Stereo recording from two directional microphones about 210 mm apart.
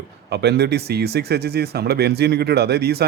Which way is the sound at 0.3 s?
50° right (ahead or behind).